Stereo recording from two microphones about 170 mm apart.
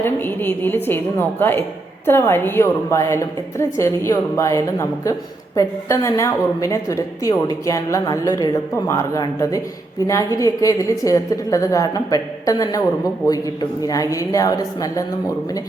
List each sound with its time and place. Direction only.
0.0 s a woman's voice: 10° left (ahead or behind)